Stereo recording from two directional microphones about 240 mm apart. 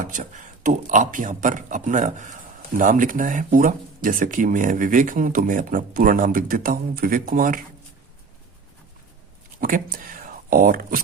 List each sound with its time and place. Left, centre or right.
0.0 s speech: right
9.6 s speech: right